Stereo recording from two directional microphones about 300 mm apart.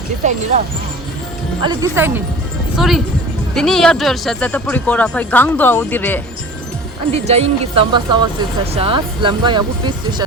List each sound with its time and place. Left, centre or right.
0.5 s speech: right
1.6 s speech: centre
7.1 s speech: right